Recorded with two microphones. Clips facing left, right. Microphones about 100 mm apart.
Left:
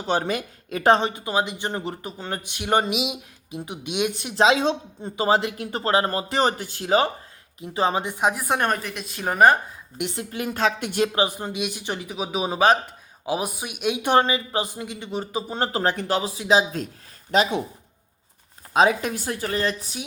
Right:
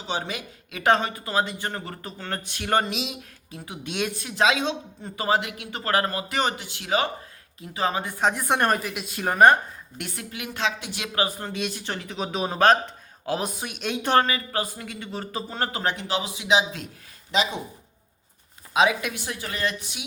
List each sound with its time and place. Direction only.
0.0 s speech: 50° left (ahead or behind); by 6.5 s 30° left (ahead or behind)
6.6 s speech: 40° left (ahead or behind); by 8.1 s 25° left (ahead or behind)
8.2 s a woman's voice: 5° left (ahead or behind)
10.2 s speech: 40° left (ahead or behind)
11.1 s speech: 20° left (ahead or behind); by 17.5 s 50° left (ahead or behind)
18.7 s speech: 40° left (ahead or behind)